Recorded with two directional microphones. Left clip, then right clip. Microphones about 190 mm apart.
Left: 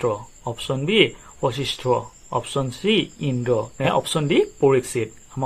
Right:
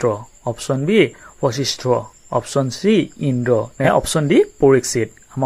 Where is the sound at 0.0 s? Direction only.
40° right (ahead or behind).